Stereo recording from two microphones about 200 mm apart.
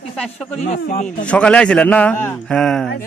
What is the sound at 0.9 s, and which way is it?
Speech, 40° left (ahead or behind).